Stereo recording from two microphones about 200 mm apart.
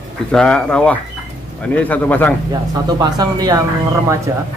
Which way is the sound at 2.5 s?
20° right (ahead or behind).